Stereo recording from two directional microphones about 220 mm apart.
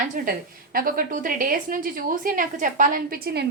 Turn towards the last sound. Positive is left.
turn(degrees=-45)  # may be behind; listen again after turning